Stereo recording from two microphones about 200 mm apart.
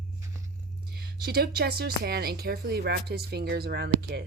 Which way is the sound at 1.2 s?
55° right (ahead or behind).